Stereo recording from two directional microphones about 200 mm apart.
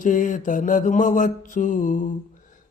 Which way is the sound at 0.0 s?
40° left (ahead or behind).